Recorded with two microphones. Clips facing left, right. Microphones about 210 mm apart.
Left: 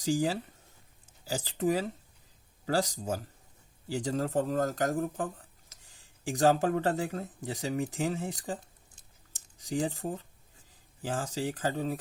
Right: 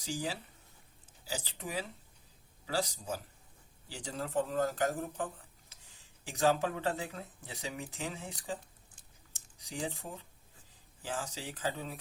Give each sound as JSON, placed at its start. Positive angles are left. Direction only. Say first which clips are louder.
{"t": 0.0, "sound": "speech", "louder": "left 9 dB", "side_deg": 45}
{"t": 6.3, "sound": "speech", "louder": "left 5 dB", "side_deg": 40}
{"t": 9.6, "sound": "speech", "louder": "left 8 dB", "side_deg": 45}